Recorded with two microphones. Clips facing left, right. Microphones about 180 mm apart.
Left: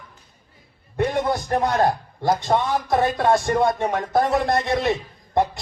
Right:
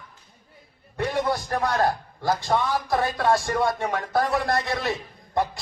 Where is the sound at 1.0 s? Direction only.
20° left (ahead or behind).